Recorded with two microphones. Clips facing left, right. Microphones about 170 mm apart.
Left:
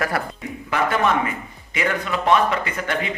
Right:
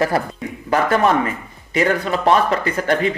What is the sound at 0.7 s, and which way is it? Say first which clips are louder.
A man's voice: right 4 dB; 40° right (ahead or behind).